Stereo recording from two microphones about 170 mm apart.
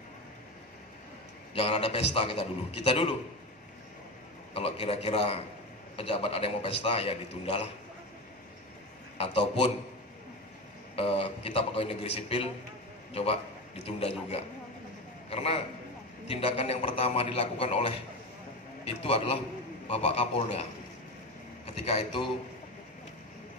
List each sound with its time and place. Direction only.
1.5 s a man's voice: 35° left (ahead or behind)
4.6 s a man's voice: 35° left (ahead or behind)
11.0 s a man's voice: 35° left (ahead or behind)
21.7 s a man's voice: 40° left (ahead or behind)